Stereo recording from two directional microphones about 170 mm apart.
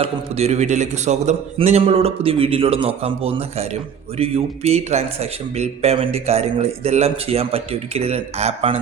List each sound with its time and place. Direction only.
0.0 s speech: 40° right (ahead or behind)